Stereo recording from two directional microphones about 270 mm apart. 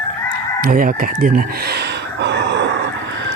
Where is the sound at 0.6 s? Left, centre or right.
Right.